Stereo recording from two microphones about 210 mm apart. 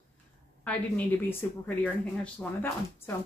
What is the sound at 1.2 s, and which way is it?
Speech, 10° left (ahead or behind).